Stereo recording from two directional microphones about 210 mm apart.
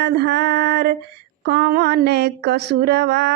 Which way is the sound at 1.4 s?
45° right (ahead or behind).